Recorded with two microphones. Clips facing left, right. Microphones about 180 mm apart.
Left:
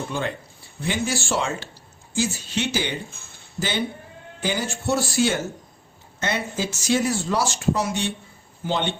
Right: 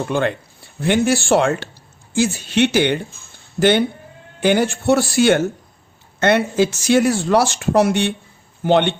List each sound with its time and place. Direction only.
0.1 s speech: 65° right (ahead or behind)